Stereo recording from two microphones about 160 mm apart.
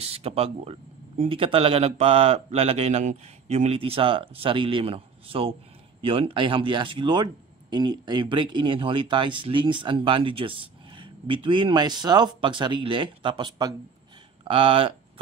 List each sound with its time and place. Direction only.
0.0 s speech: 40° right (ahead or behind)